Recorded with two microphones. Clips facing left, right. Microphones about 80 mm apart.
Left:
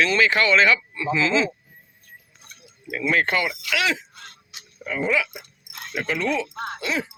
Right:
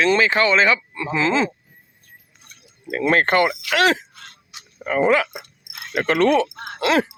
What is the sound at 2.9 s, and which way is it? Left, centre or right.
Speech, right.